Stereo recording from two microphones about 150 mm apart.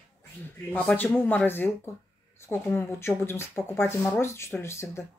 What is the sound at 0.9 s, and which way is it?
Speech, 10° left (ahead or behind).